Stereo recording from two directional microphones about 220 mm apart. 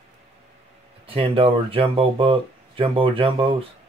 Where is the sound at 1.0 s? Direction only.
25° right (ahead or behind).